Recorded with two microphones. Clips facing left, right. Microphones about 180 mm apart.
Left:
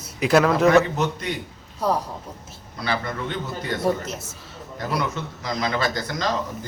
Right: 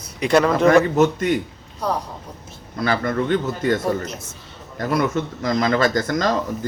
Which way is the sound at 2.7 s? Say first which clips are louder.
Right 6 dB; 50° right (ahead or behind).